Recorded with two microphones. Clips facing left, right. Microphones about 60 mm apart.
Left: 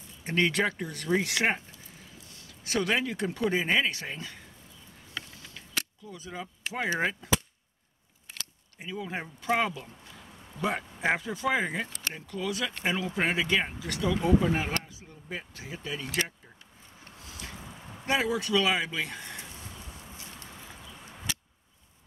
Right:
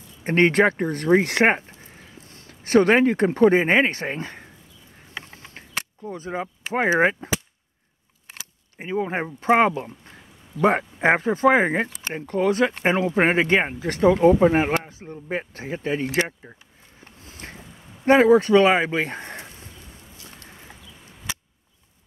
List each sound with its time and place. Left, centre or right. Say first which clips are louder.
0.2 s speech: right 9 dB; right
5.1 s a sound: right 4 dB; right
7.0 s speech: right 10 dB; right
8.7 s speech: right 10 dB; right
17.0 s a sound: right 3 dB; right
18.0 s speech: right 13 dB; right